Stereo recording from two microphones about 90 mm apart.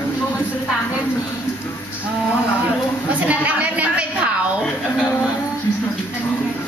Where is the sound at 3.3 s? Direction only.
15° right (ahead or behind).